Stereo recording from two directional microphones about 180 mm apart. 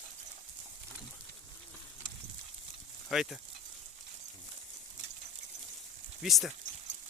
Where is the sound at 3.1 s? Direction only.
Centre (ahead or behind).